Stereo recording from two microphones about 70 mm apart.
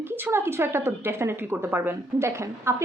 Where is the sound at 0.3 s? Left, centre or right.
Right.